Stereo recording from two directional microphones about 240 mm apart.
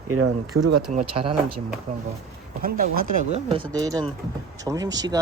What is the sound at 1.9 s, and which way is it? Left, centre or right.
Speech, right.